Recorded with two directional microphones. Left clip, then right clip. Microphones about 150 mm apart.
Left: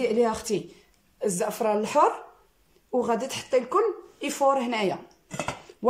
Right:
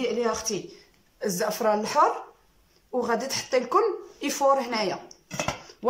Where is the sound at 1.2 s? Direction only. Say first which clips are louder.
Right 1 dB; 10° left (ahead or behind).